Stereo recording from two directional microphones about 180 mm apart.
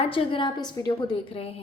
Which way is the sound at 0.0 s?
30° left (ahead or behind).